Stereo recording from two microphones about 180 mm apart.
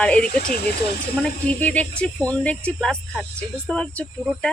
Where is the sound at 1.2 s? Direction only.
10° left (ahead or behind).